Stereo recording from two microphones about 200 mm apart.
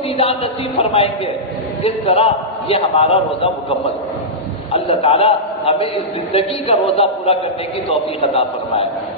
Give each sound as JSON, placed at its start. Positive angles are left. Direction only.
{"t": 0.2, "sound": "a man's voice", "side_deg": 30}
{"t": 4.7, "sound": "a man's voice", "side_deg": 30}